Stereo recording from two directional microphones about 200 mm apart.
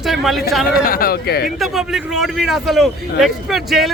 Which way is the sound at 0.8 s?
45° left (ahead or behind).